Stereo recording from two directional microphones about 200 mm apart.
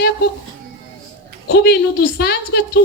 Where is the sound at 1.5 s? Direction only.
55° left (ahead or behind).